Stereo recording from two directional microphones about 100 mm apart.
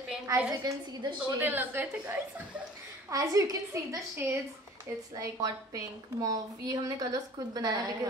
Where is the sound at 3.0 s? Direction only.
35° right (ahead or behind).